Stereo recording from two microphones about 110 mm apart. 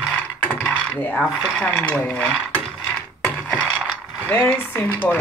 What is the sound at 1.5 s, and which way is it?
Speech, 10° left (ahead or behind).